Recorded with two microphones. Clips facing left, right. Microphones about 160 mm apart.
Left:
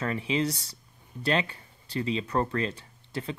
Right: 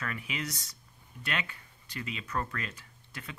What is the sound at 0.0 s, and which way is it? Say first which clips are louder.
Speech: left 10 dB; 30° left (ahead or behind).